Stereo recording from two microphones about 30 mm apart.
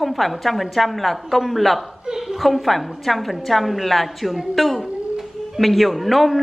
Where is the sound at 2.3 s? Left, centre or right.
Centre.